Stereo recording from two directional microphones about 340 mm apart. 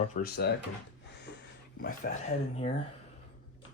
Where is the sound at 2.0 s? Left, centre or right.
Left.